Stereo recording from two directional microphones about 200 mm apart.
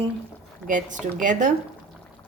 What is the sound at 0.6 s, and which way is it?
Speech, 40° right (ahead or behind).